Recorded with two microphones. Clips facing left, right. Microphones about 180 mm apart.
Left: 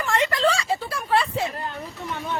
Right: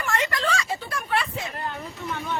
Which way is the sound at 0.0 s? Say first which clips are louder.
Left 5 dB; 25° left (ahead or behind).